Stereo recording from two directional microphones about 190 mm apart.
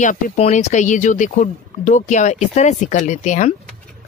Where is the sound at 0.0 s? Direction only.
40° left (ahead or behind).